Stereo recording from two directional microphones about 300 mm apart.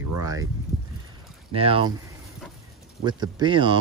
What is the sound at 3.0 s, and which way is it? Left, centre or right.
Speech, centre.